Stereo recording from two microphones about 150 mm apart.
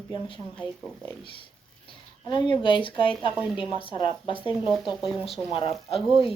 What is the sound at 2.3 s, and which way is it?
Speech, 35° left (ahead or behind).